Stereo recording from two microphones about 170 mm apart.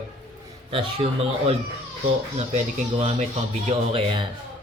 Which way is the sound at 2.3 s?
40° right (ahead or behind).